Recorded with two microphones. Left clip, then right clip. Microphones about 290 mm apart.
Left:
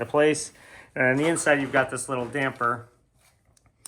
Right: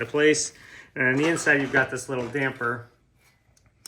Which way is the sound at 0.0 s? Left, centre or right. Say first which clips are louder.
Right 1 dB; centre.